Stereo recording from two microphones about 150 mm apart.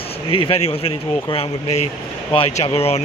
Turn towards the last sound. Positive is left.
turn(degrees=45)  # may be behind; listen again after turning